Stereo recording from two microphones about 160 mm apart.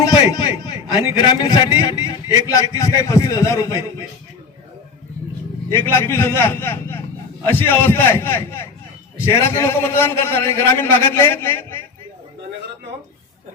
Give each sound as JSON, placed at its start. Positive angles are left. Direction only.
{"t": 0.0, "sound": "a sound", "side_deg": 25}
{"t": 1.1, "sound": "a man's voice", "side_deg": 25}
{"t": 5.7, "sound": "a man's voice", "side_deg": 15}